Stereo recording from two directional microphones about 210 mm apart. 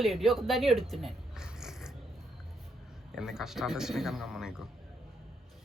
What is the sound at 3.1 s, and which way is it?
Speech, centre (ahead or behind).